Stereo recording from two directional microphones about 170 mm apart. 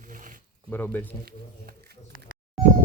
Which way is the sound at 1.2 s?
65° right (ahead or behind).